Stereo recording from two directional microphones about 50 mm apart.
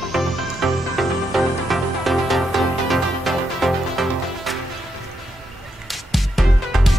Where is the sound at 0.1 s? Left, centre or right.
Centre.